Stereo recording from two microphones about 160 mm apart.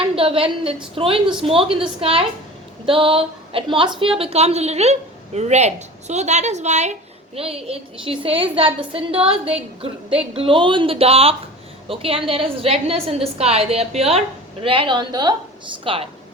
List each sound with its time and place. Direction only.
0.2 s a woman's voice: 35° right (ahead or behind)
2.8 s a sound: 35° right (ahead or behind)
4.0 s a woman's voice: 35° right (ahead or behind)